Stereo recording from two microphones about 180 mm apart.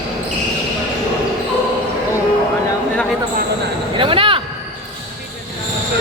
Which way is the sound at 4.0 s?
30° right (ahead or behind).